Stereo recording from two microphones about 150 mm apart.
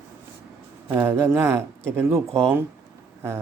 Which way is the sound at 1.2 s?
15° right (ahead or behind).